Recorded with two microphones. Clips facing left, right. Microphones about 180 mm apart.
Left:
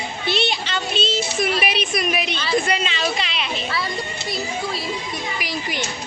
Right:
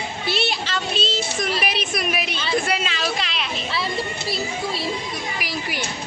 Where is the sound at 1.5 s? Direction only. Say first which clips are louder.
Left 2 dB; centre (ahead or behind).